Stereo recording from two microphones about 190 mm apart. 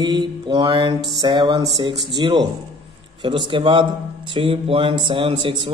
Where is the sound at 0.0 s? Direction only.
25° right (ahead or behind).